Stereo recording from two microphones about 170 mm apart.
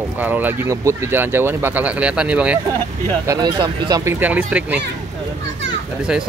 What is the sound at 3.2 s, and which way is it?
Speech, 20° right (ahead or behind).